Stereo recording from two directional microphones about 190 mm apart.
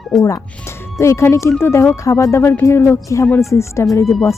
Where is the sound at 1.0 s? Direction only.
15° left (ahead or behind).